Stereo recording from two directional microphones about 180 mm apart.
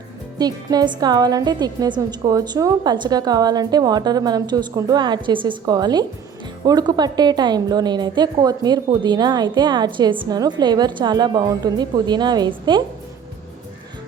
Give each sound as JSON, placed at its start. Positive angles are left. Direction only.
{"t": 0.3, "sound": "a woman's voice", "side_deg": -20}